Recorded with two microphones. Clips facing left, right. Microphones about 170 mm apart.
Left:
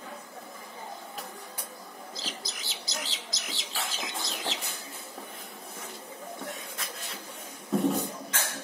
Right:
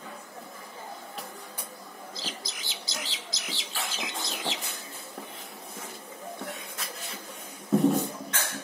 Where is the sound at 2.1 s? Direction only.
40° left (ahead or behind).